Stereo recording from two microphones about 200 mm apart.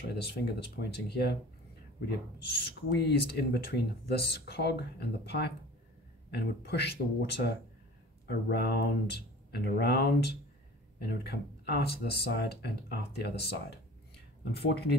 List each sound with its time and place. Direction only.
0.7 s speech: 55° left (ahead or behind)